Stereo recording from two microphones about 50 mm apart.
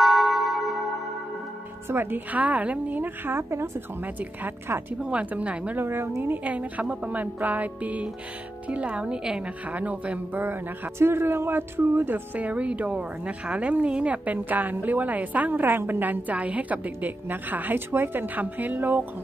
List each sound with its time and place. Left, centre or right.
0.0 s music: centre
1.9 s a woman's voice: right
4.0 s a woman's voice: right
5.8 s a woman's voice: right
6.4 s a woman's voice: right
9.7 s a woman's voice: right
11.0 s a woman's voice: right
12.4 s a woman's voice: right